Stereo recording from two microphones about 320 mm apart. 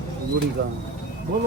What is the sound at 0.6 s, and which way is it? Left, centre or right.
Speech, right.